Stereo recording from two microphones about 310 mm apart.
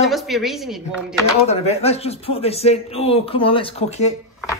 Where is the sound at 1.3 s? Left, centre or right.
Centre.